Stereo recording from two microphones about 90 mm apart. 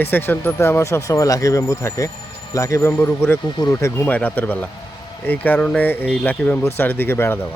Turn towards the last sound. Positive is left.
turn(degrees=25)  # may be behind; listen again after turning